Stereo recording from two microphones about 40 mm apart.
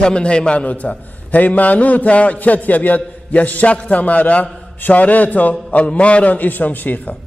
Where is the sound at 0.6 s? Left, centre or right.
Left.